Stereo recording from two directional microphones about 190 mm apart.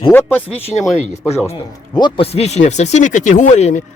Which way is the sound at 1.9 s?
25° left (ahead or behind).